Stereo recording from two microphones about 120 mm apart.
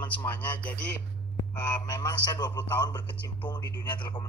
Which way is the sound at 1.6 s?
35° left (ahead or behind).